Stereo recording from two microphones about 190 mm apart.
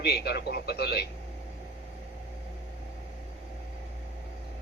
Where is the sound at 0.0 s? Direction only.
60° left (ahead or behind).